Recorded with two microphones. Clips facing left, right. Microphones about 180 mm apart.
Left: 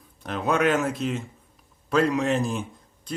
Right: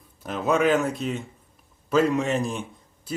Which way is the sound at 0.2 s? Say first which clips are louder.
Right 1 dB; centre (ahead or behind).